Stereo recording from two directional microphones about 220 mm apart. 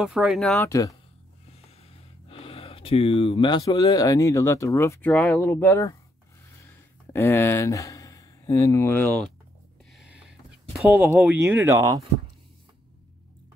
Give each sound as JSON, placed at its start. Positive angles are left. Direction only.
{"t": 0.0, "sound": "speech", "side_deg": -5}
{"t": 0.7, "sound": "speech", "side_deg": 15}
{"t": 1.5, "sound": "speech", "side_deg": 25}
{"t": 6.6, "sound": "a sound", "side_deg": 10}
{"t": 10.8, "sound": "speech", "side_deg": -5}